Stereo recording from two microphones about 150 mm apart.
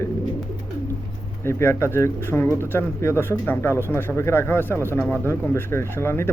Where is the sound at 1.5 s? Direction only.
15° left (ahead or behind).